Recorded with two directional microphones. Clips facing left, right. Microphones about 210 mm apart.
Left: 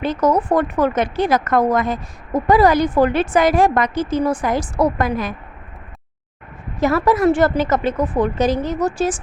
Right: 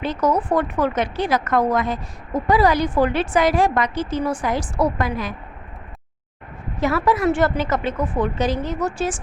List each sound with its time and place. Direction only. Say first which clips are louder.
0.0 s a woman's voice: left 3 dB; 45° left (ahead or behind)
6.7 s a woman's voice: left 3 dB; 40° left (ahead or behind)